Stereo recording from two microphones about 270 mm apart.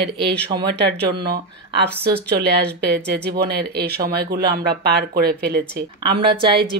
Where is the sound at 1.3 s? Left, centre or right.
Right.